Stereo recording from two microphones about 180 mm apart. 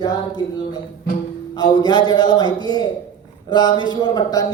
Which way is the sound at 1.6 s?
20° left (ahead or behind).